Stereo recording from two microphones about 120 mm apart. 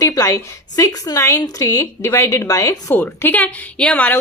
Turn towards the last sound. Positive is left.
turn(degrees=10)  # may be behind; listen again after turning